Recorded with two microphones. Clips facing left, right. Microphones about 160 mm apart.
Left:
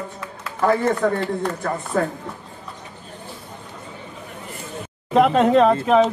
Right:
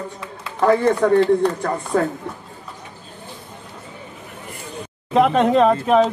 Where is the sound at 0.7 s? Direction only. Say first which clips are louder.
Right 5 dB; 40° right (ahead or behind).